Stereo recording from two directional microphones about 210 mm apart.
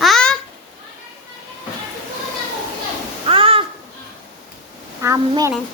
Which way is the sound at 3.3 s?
25° right (ahead or behind).